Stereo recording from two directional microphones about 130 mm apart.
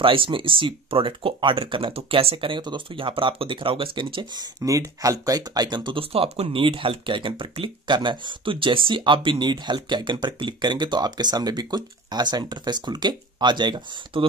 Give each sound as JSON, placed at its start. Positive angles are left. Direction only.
{"t": 0.0, "sound": "speech", "side_deg": -40}